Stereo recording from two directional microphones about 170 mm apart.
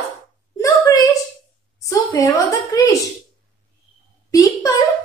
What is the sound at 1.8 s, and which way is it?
A woman's voice, 20° left (ahead or behind).